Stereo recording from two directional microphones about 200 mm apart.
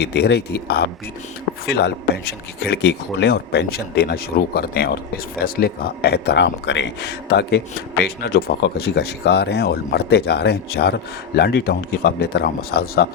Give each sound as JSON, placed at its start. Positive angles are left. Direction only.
{"t": 0.0, "sound": "speech", "side_deg": 55}